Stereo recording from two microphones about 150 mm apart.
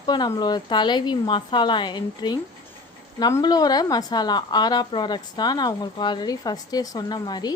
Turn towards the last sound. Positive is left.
turn(degrees=25)  # may be behind; listen again after turning